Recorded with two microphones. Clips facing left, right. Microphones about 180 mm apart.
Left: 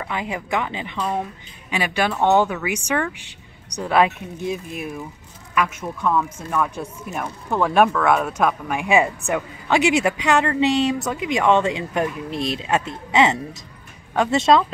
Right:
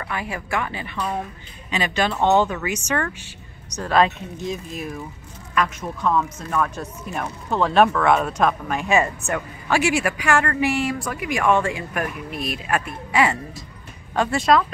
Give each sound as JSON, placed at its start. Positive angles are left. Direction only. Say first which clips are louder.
{"t": 0.0, "sound": "speech", "louder": "left 2 dB", "side_deg": 20}
{"t": 5.5, "sound": "speech", "louder": "even", "side_deg": 10}